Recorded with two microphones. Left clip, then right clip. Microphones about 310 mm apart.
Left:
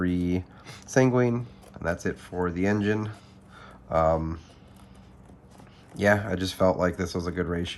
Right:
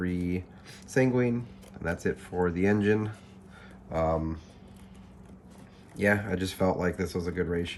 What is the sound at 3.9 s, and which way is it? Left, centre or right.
Speech, left.